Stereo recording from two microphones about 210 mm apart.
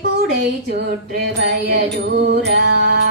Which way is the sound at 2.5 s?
50° right (ahead or behind).